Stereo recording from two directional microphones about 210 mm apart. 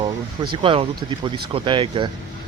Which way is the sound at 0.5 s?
25° right (ahead or behind).